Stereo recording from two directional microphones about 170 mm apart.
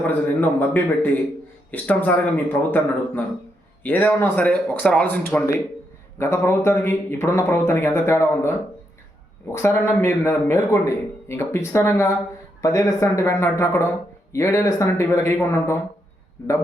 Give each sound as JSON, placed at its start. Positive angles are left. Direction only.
{"t": 0.1, "sound": "a man's voice", "side_deg": 10}